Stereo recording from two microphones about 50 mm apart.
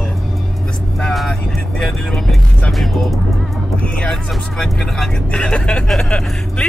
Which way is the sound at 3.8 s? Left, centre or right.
Left.